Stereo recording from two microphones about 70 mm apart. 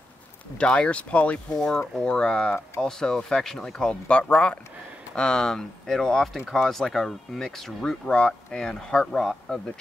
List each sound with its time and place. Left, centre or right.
0.6 s speech: centre
3.9 s speech: centre